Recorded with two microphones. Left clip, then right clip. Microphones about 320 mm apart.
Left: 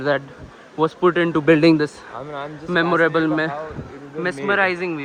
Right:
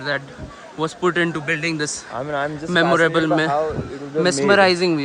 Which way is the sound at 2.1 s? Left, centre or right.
Right.